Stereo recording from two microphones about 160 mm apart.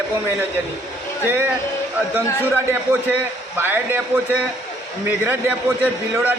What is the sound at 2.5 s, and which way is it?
A man's voice, 15° right (ahead or behind).